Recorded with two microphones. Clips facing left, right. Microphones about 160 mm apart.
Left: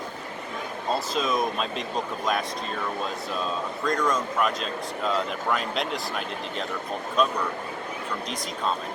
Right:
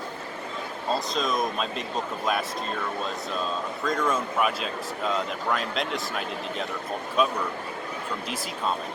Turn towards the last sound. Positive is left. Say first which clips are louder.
# even
turn(degrees=-5)  # may be behind; listen again after turning